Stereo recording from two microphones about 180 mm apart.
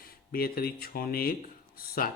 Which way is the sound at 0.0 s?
55° left (ahead or behind).